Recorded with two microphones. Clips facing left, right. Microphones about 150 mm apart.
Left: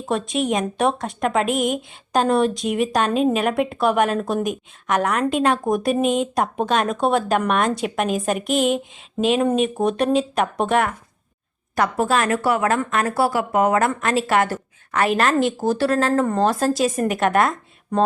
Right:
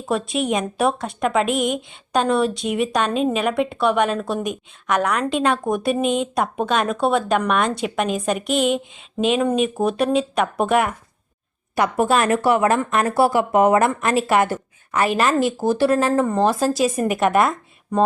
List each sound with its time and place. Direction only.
0.1 s a woman's voice: centre (ahead or behind)
15.0 s a woman's voice: 5° right (ahead or behind)